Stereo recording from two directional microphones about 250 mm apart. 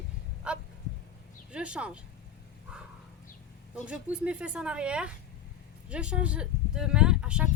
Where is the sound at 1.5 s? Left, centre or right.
Centre.